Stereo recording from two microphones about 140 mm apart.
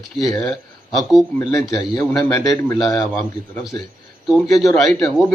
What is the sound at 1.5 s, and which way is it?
Speech, 25° left (ahead or behind).